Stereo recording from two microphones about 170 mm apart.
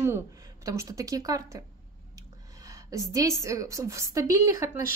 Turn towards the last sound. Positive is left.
turn(degrees=-20)  # may be behind; listen again after turning